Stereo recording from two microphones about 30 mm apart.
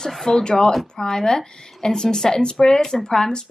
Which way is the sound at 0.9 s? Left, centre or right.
Left.